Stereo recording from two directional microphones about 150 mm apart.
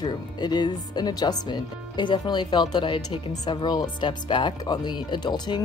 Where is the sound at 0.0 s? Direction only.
30° left (ahead or behind).